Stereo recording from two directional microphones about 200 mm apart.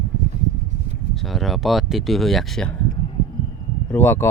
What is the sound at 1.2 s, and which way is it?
Speech, centre (ahead or behind).